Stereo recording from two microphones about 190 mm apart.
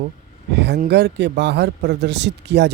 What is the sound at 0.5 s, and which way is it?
A man's voice, 65° right (ahead or behind).